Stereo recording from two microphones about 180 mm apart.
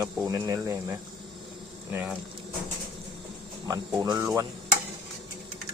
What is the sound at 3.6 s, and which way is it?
Speech, 20° right (ahead or behind).